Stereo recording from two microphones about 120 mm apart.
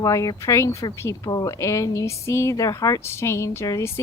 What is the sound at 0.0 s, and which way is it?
Speech, 30° left (ahead or behind).